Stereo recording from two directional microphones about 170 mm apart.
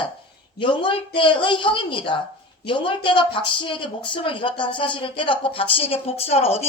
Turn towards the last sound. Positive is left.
turn(degrees=35)  # may be behind; listen again after turning